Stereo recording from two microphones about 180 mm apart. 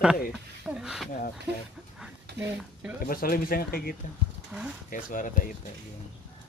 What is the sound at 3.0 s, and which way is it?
Speech, 55° left (ahead or behind).